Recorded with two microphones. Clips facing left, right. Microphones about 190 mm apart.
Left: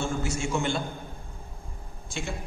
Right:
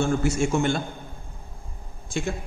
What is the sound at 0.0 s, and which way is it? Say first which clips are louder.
Speech: right 7 dB; 55° right (ahead or behind).